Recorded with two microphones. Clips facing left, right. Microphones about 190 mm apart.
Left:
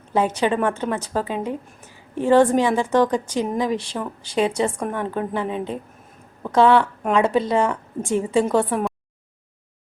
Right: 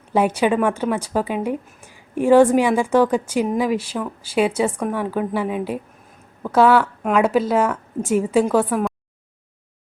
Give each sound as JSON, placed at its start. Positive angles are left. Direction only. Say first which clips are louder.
{"t": 0.1, "sound": "a woman's voice", "louder": "right 2 dB", "side_deg": -10}